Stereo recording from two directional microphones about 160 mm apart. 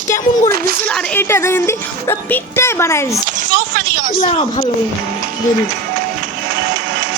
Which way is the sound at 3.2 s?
55° right (ahead or behind).